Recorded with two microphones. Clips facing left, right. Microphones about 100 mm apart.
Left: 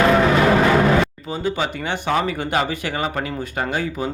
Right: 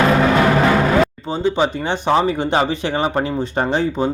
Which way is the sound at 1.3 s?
25° right (ahead or behind).